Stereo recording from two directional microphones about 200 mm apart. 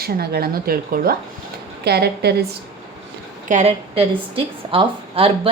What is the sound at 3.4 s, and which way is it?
A woman's voice, 35° right (ahead or behind).